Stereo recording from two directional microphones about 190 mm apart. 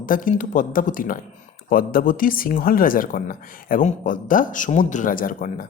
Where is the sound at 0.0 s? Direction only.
45° left (ahead or behind).